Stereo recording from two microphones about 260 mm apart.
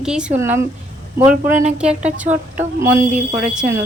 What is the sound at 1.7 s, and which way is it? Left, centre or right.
Speech, centre.